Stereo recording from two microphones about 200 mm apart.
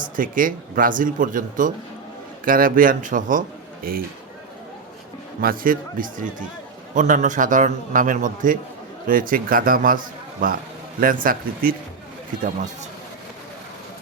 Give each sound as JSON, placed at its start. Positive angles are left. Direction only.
{"t": 0.0, "sound": "speech", "side_deg": -45}
{"t": 5.4, "sound": "a man's voice", "side_deg": -45}